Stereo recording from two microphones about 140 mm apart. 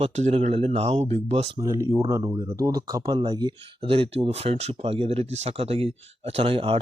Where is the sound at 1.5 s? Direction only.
20° right (ahead or behind).